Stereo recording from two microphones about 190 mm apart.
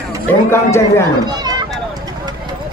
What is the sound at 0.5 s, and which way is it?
Speech, 15° left (ahead or behind).